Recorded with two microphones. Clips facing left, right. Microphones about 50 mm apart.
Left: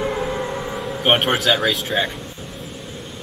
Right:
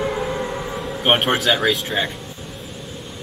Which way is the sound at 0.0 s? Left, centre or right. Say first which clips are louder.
Even; centre.